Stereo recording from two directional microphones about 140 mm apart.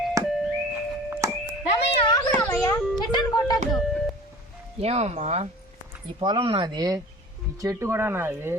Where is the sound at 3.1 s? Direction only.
30° left (ahead or behind).